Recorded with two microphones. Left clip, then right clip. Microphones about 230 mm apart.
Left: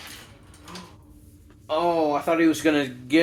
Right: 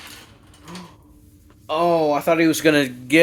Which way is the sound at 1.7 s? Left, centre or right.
Right.